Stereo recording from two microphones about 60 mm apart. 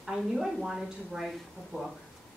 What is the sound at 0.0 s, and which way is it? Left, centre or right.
A woman's voice, centre.